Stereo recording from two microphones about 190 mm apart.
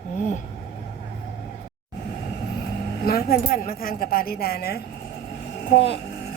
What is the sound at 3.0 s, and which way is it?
Speech, 50° left (ahead or behind).